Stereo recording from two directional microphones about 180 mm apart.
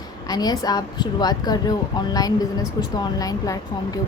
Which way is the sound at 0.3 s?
20° left (ahead or behind).